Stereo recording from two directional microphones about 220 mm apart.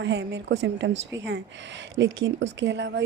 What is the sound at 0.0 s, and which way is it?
A woman's voice, 50° right (ahead or behind).